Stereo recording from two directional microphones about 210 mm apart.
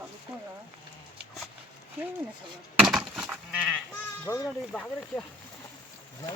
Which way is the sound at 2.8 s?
Centre (ahead or behind).